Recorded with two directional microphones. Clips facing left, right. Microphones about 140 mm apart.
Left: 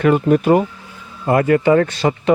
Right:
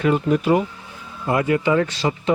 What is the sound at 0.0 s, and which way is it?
Speech, 55° left (ahead or behind).